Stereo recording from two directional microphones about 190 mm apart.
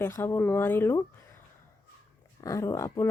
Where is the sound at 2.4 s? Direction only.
15° left (ahead or behind).